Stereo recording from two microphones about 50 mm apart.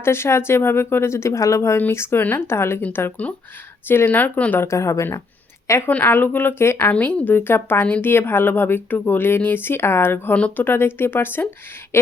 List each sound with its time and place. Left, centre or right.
0.0 s speech: left
1.9 s speech: left
3.8 s speech: left
4.6 s a woman's voice: left
6.0 s speech: left
6.6 s speech: left
6.9 s a woman's voice: left
7.3 s speech: left